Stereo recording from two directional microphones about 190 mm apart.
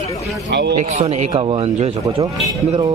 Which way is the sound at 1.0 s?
30° right (ahead or behind).